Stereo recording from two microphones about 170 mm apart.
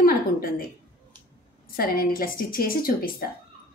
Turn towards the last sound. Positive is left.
turn(degrees=60)  # may be behind; listen again after turning